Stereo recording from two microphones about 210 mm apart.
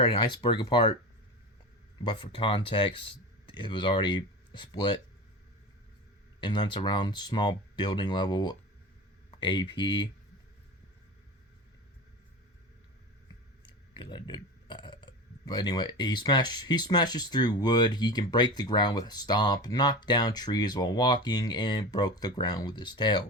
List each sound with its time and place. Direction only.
0.0 s speech: 25° left (ahead or behind)
2.0 s speech: 25° left (ahead or behind)
6.4 s speech: 20° left (ahead or behind)
13.6 s speech: 20° left (ahead or behind)